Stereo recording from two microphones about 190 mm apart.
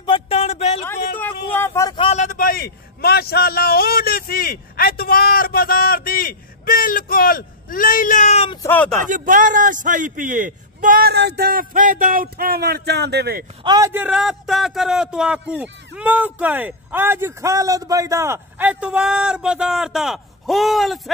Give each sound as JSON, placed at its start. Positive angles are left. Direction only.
{"t": 0.0, "sound": "a sound", "side_deg": 30}
{"t": 0.8, "sound": "a sound", "side_deg": 10}
{"t": 2.0, "sound": "a man's voice", "side_deg": 35}
{"t": 8.6, "sound": "speech", "side_deg": 5}
{"t": 9.0, "sound": "a man's voice", "side_deg": -45}
{"t": 13.7, "sound": "a man's voice", "side_deg": -15}